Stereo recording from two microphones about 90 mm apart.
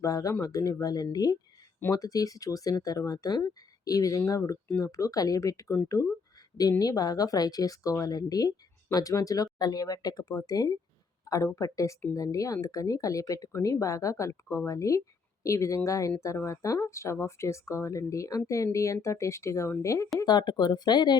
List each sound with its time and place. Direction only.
0.0 s speech: 40° left (ahead or behind)
20.2 s speech: 50° left (ahead or behind)